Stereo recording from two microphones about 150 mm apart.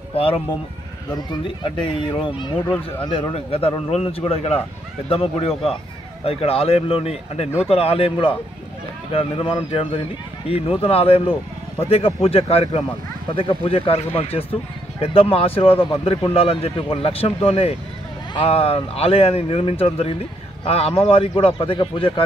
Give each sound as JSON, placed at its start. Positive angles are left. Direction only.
{"t": 0.1, "sound": "a man's voice", "side_deg": 40}